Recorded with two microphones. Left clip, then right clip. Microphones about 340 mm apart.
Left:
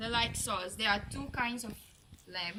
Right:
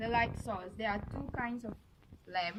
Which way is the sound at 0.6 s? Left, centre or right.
Left.